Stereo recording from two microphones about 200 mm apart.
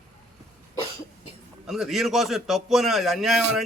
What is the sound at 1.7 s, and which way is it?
A man's voice, centre (ahead or behind).